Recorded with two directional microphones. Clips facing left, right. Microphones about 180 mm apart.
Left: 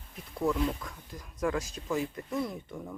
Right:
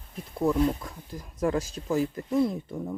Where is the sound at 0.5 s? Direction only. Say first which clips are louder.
Right 6 dB; 35° right (ahead or behind).